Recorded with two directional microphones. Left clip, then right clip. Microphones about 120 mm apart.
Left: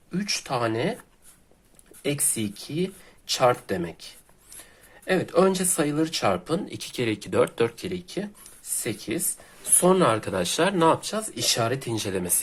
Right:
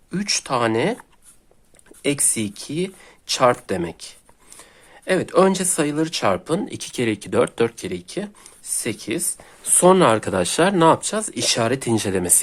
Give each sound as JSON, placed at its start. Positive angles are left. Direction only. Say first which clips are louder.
{"t": 0.1, "sound": "speech", "louder": "right 5 dB", "side_deg": -60}
{"t": 2.0, "sound": "speech", "louder": "right 5 dB", "side_deg": -50}
{"t": 9.7, "sound": "speech", "louder": "right 6 dB", "side_deg": -65}